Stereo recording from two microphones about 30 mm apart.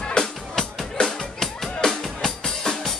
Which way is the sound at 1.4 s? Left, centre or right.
Centre.